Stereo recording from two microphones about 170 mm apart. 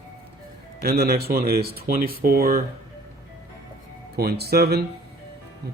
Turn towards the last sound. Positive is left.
turn(degrees=-70)  # may be behind; listen again after turning